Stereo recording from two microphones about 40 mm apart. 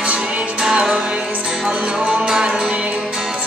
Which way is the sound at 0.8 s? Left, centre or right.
Right.